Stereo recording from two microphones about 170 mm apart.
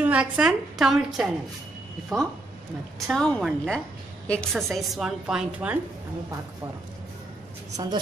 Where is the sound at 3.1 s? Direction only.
5° left (ahead or behind).